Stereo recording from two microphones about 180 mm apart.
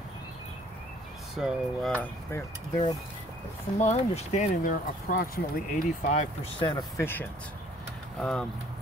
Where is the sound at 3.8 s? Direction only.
35° left (ahead or behind).